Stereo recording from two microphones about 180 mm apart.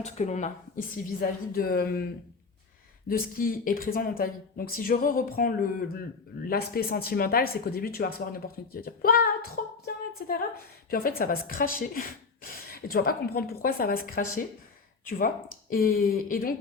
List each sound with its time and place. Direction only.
0.0 s speech: 40° left (ahead or behind); by 2.0 s 55° left (ahead or behind)
3.1 s speech: 55° left (ahead or behind)
9.8 s a sound: 55° left (ahead or behind)
10.9 s speech: 55° left (ahead or behind)
15.7 s speech: 55° left (ahead or behind)